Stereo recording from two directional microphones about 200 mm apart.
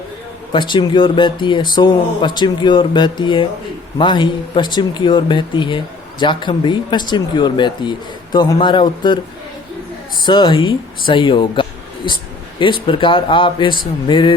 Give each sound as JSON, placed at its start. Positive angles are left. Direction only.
{"t": 0.5, "sound": "speech", "side_deg": 25}
{"t": 10.2, "sound": "speech", "side_deg": 25}